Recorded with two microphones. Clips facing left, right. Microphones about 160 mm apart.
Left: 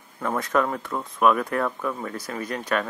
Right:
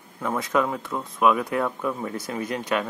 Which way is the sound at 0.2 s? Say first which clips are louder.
Even; 10° right (ahead or behind).